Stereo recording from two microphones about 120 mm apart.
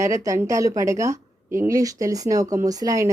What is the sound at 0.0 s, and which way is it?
A woman's voice, 25° right (ahead or behind).